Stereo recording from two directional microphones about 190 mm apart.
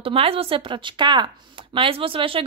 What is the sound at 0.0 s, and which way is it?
Speech, 30° right (ahead or behind).